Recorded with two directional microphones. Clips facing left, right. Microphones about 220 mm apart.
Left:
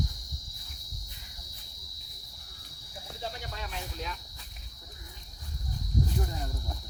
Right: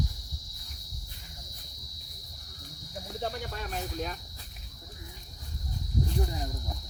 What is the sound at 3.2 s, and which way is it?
Speech, 50° right (ahead or behind).